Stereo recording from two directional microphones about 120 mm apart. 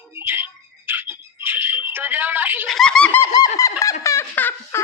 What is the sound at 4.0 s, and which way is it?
Turkey, 25° left (ahead or behind).